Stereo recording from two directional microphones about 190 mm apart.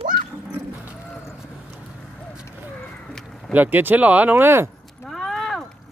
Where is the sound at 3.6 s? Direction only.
10° right (ahead or behind).